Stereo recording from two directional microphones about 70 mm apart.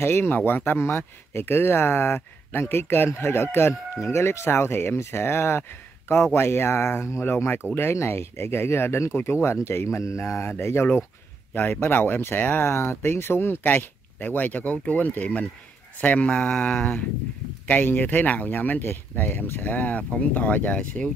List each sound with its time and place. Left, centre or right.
0.0 s speech: left
11.5 s speech: left